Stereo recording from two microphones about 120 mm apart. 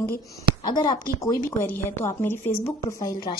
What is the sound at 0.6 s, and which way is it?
Speech, 40° left (ahead or behind).